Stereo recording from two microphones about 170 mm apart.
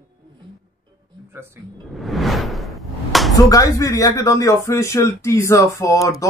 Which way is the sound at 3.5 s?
20° left (ahead or behind).